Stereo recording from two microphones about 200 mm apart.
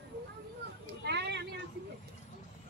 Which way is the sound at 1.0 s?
55° right (ahead or behind).